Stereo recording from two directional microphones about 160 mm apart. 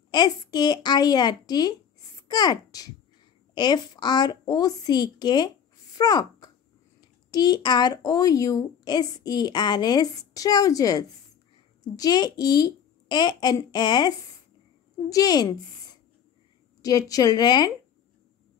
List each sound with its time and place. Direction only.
0.1 s a woman's voice: 25° left (ahead or behind)
16.8 s a woman's voice: 25° left (ahead or behind)